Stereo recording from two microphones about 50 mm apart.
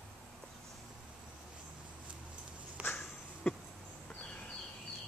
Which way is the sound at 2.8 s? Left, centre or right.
Right.